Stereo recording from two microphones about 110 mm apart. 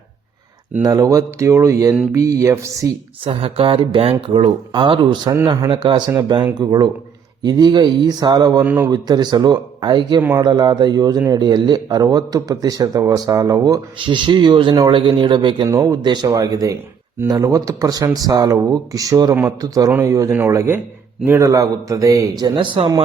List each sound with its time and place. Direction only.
0.8 s a man's voice: 35° right (ahead or behind)
3.2 s a sound: 55° right (ahead or behind)
4.7 s a man's voice: 45° right (ahead or behind)
8.6 s a man's voice: 15° right (ahead or behind)
8.9 s a man's voice: 40° right (ahead or behind)
10.2 s a man's voice: 20° right (ahead or behind)
10.4 s speech: 40° right (ahead or behind)
14.0 s a man's voice: 45° right (ahead or behind)
15.6 s a man's voice: 35° right (ahead or behind)
22.5 s a man's voice: 50° right (ahead or behind)